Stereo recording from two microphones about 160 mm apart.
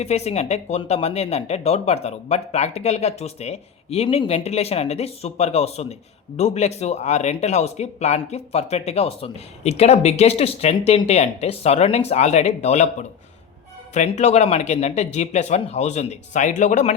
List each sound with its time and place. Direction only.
0.0 s speech: 40° left (ahead or behind)